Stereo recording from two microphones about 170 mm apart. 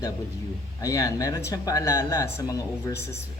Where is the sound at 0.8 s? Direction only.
20° left (ahead or behind).